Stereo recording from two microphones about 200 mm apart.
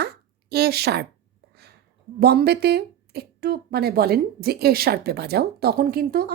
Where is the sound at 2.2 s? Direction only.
55° right (ahead or behind).